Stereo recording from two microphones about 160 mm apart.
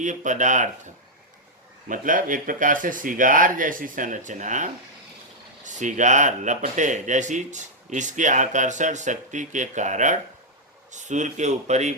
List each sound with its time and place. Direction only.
0.0 s speech: 50° right (ahead or behind)
1.9 s speech: 55° right (ahead or behind)